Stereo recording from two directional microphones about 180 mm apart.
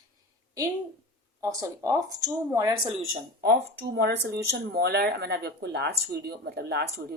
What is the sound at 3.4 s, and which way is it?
Speech, 60° right (ahead or behind).